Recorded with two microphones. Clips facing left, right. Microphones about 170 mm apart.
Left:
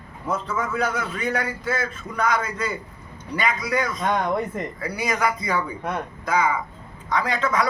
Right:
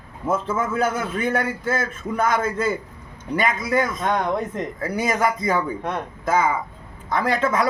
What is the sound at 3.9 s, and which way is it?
Speech, centre (ahead or behind).